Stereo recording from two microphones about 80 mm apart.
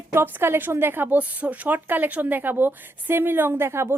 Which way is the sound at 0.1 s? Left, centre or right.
Right.